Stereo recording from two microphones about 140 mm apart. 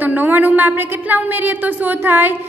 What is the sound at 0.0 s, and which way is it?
A woman's voice, 10° right (ahead or behind).